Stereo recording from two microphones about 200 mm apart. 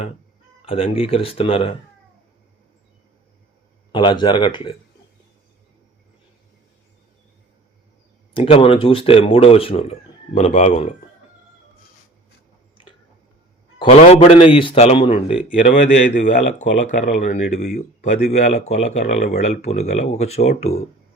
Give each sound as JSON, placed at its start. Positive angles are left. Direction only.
{"t": 0.6, "sound": "speech", "side_deg": 30}
{"t": 3.9, "sound": "speech", "side_deg": 25}
{"t": 8.3, "sound": "speech", "side_deg": 25}
{"t": 13.7, "sound": "speech", "side_deg": 30}